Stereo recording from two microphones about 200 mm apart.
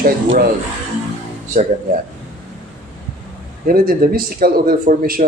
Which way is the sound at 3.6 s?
45° right (ahead or behind).